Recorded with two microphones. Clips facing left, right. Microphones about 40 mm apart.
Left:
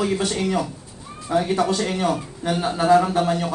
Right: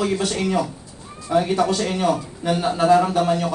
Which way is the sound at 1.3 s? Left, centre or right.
Centre.